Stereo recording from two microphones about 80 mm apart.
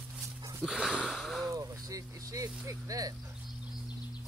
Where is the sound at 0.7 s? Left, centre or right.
Centre.